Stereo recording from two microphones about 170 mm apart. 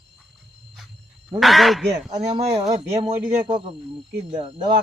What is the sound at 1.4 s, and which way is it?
Speech, centre (ahead or behind).